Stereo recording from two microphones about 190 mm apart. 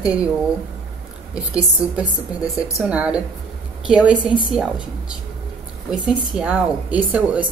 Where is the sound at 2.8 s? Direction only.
5° right (ahead or behind).